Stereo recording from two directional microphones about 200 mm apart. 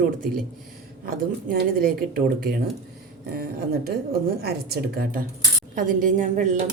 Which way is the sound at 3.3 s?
50° right (ahead or behind).